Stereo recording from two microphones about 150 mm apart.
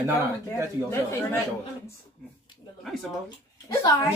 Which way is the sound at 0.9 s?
15° left (ahead or behind).